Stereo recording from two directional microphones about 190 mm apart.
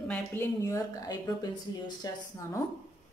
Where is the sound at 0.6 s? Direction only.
20° left (ahead or behind).